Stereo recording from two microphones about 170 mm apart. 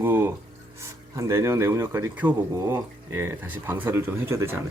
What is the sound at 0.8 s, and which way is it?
Speech, 15° right (ahead or behind).